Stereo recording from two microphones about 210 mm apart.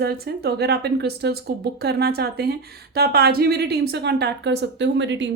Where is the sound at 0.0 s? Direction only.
50° right (ahead or behind).